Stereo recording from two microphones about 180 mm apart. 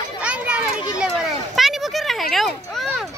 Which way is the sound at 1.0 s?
Centre (ahead or behind).